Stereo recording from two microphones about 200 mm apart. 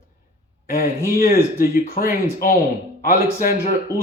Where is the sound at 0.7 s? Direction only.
45° left (ahead or behind).